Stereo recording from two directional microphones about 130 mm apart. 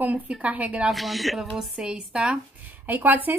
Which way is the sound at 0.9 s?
Centre (ahead or behind).